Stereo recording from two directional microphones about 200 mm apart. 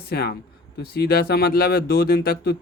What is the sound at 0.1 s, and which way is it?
Speech, 50° left (ahead or behind).